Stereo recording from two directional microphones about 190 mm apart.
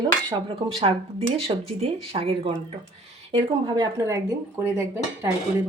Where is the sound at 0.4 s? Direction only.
30° right (ahead or behind).